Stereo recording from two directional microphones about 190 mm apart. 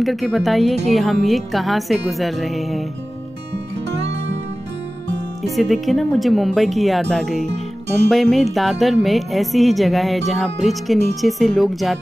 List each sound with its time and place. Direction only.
0.0 s speech: centre (ahead or behind)
4.0 s music: 65° right (ahead or behind)
5.6 s speech: centre (ahead or behind)